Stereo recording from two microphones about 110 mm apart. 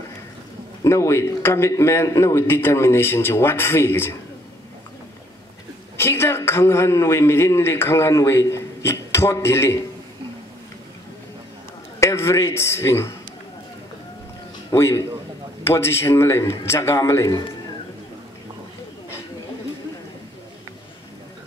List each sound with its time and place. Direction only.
0.8 s a man's voice: 25° left (ahead or behind)
5.9 s a man's voice: 20° left (ahead or behind)
12.0 s a man's voice: 25° left (ahead or behind)
14.7 s a man's voice: 25° left (ahead or behind)